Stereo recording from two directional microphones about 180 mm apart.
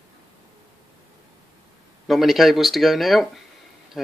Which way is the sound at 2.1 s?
Centre (ahead or behind).